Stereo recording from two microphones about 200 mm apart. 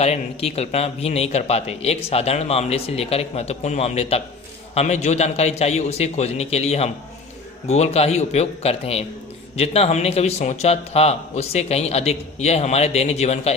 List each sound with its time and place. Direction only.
0.0 s a man's voice: 30° left (ahead or behind)